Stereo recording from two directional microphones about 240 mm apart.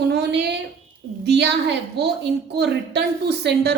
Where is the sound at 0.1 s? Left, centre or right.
Right.